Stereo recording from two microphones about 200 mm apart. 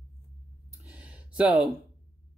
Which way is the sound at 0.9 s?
5° right (ahead or behind).